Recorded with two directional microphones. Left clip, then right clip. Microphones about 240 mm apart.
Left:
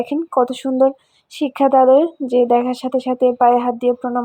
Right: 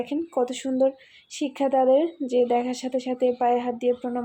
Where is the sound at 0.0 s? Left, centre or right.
Left.